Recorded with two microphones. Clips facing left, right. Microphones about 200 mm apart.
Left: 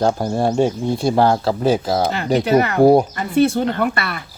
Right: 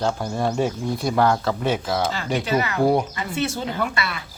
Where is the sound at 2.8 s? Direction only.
40° left (ahead or behind); by 4.2 s 55° left (ahead or behind).